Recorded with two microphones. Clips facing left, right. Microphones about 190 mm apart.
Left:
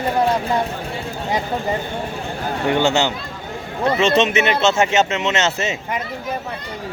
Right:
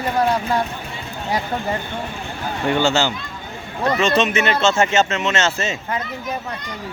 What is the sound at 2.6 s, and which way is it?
Speech, 20° left (ahead or behind).